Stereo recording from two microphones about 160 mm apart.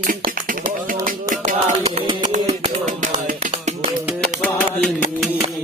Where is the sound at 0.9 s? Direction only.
55° right (ahead or behind).